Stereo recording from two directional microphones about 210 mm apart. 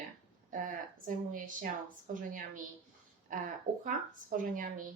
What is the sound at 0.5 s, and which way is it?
Speech, 40° right (ahead or behind).